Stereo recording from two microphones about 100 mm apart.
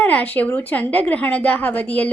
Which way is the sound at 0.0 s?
15° left (ahead or behind).